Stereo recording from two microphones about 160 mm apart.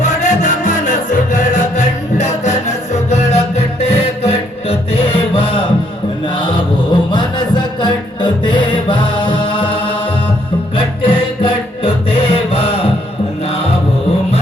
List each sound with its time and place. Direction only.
0.0 s music: 45° left (ahead or behind)